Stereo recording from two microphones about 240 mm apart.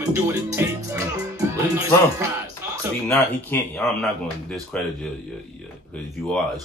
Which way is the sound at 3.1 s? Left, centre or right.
Centre.